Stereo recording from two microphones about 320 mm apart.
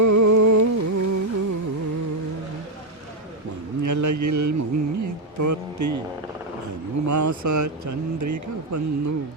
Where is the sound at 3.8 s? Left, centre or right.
Right.